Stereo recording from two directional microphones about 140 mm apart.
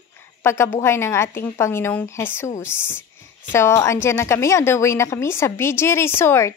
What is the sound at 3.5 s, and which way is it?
A woman's voice, 20° left (ahead or behind).